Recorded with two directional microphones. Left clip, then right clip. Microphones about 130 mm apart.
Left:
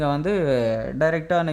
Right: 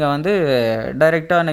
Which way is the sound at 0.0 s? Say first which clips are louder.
Right 5 dB; 20° right (ahead or behind).